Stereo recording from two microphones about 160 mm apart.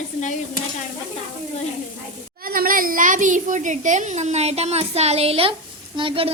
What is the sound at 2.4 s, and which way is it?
A child's voice, 65° right (ahead or behind).